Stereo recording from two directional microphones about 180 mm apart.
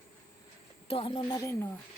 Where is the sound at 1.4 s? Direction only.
15° left (ahead or behind).